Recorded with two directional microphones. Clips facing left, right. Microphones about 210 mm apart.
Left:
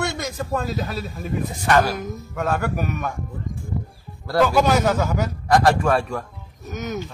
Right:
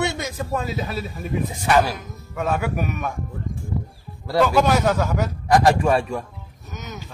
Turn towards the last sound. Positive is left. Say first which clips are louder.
# left 7 dB
turn(degrees=50)  # may be behind; listen again after turning